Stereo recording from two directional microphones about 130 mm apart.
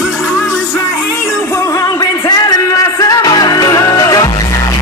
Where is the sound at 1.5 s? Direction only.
25° left (ahead or behind).